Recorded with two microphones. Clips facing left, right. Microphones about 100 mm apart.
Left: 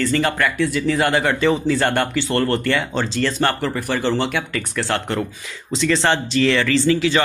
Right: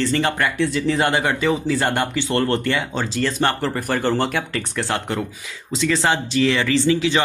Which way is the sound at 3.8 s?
50° right (ahead or behind).